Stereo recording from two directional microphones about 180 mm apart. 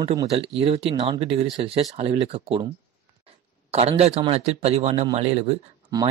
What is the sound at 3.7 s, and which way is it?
Speech, 35° right (ahead or behind).